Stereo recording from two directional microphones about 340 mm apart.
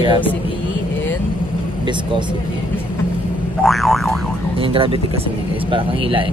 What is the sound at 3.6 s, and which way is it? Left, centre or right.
Boing, centre.